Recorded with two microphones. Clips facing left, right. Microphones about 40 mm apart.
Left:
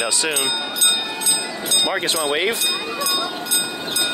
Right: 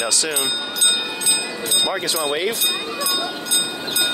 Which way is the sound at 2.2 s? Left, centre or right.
Left.